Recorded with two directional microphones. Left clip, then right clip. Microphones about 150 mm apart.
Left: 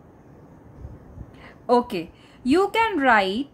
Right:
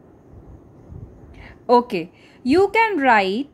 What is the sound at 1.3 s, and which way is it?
A woman's voice, 25° right (ahead or behind).